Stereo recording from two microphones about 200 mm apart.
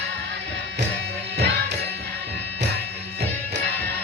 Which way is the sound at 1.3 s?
60° right (ahead or behind).